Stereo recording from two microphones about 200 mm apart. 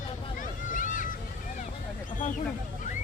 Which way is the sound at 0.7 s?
40° left (ahead or behind).